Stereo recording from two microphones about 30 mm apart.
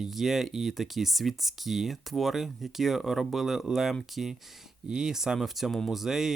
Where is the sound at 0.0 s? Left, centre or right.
Centre.